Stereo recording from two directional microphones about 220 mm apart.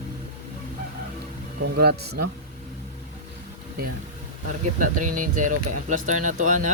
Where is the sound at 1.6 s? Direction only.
45° right (ahead or behind).